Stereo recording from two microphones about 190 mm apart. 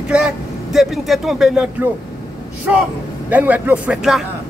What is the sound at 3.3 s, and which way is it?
Speech, 10° right (ahead or behind).